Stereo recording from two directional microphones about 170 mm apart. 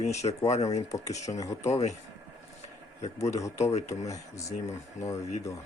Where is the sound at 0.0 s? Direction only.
40° left (ahead or behind).